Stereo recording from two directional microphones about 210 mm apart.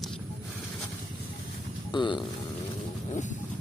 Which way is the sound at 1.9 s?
20° left (ahead or behind).